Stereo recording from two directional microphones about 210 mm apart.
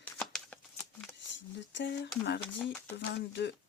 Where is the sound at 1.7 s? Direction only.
55° left (ahead or behind).